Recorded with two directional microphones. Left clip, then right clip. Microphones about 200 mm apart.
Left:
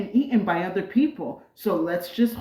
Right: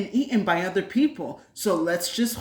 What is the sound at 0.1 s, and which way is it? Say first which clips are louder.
Speech: left 1 dB; 30° right (ahead or behind).